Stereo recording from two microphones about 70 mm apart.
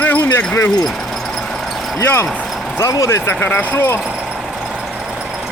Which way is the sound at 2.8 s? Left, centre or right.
Left.